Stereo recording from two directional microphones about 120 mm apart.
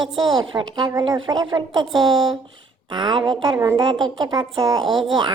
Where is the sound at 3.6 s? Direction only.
25° right (ahead or behind).